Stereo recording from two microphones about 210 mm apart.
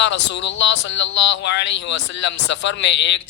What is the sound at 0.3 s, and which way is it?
A man's voice, 60° left (ahead or behind).